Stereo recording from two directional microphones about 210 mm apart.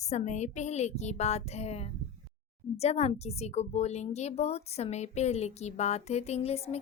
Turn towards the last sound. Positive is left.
turn(degrees=30)  # may be behind; listen again after turning